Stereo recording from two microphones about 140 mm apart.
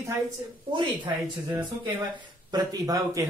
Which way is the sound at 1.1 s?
25° right (ahead or behind).